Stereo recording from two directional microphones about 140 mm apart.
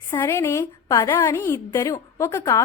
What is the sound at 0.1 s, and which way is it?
Speech, 15° left (ahead or behind).